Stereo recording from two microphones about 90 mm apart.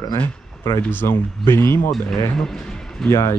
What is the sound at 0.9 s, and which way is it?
Speech, 25° left (ahead or behind).